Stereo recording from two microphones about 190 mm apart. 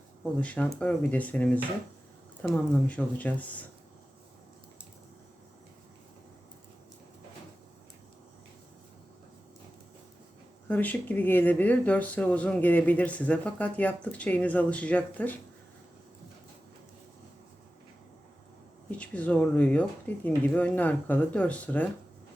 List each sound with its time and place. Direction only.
0.3 s speech: 5° left (ahead or behind)
10.7 s speech: 10° left (ahead or behind)
18.9 s speech: 5° left (ahead or behind)